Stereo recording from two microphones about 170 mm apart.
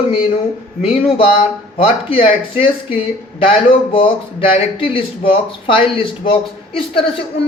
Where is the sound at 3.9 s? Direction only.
30° left (ahead or behind).